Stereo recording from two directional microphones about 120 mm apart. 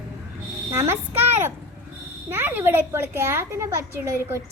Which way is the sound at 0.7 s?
20° right (ahead or behind).